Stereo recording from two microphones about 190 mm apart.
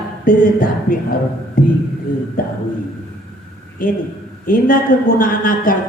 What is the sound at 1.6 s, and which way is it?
Music, 45° left (ahead or behind).